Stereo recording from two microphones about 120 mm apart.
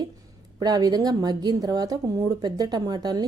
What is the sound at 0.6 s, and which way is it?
Speech, 35° right (ahead or behind).